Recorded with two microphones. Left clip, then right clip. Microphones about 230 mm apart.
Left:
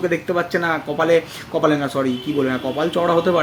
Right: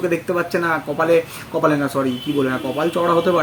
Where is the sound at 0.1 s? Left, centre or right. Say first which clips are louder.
Even; centre.